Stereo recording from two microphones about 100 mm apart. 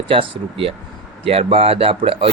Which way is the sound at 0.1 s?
65° right (ahead or behind).